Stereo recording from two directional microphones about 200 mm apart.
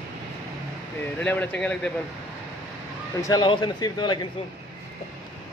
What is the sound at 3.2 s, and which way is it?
A man's voice, 20° left (ahead or behind).